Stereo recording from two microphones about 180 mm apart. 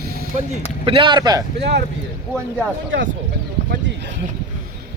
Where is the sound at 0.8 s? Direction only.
30° right (ahead or behind).